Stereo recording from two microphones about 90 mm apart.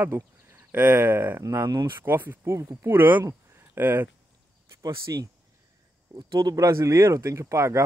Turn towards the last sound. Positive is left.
turn(degrees=-30)  # may be behind; listen again after turning